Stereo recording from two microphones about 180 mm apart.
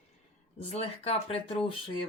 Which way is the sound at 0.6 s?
35° left (ahead or behind).